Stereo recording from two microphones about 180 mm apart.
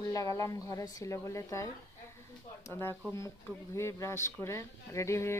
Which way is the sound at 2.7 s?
15° left (ahead or behind).